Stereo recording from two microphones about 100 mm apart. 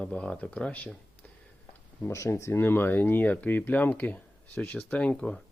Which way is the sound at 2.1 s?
30° left (ahead or behind).